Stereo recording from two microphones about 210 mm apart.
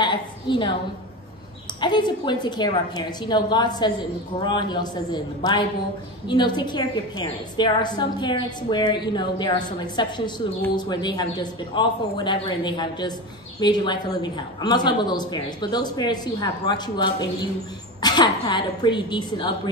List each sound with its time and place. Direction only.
0.0 s a woman's voice: 20° left (ahead or behind)
1.8 s a woman's voice: 20° left (ahead or behind)